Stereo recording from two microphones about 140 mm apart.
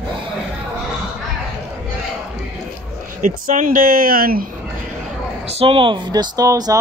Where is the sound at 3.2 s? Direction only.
70° right (ahead or behind); by 4.5 s 90° right.